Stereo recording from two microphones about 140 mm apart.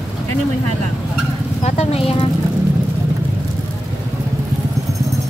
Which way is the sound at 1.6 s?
50° left (ahead or behind).